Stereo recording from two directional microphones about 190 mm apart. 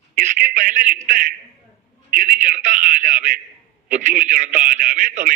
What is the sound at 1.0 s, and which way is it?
A man's voice, 45° right (ahead or behind).